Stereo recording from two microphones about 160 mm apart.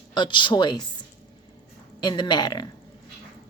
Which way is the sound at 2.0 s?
30° left (ahead or behind).